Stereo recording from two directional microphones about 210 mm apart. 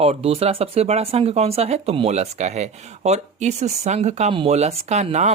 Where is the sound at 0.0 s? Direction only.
30° right (ahead or behind).